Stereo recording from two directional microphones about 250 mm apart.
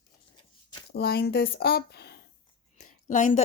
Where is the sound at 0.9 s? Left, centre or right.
Left.